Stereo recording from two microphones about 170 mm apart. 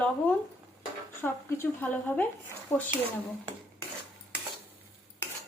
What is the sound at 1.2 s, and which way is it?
A woman's voice, 15° left (ahead or behind).